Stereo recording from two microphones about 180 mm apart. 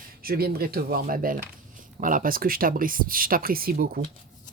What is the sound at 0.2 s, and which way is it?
Speech, 55° right (ahead or behind).